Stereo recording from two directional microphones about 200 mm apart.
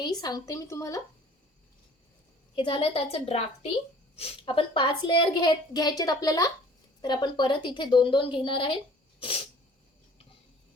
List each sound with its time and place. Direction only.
0.2 s a woman's voice: 20° left (ahead or behind)
2.6 s a woman's voice: 25° left (ahead or behind)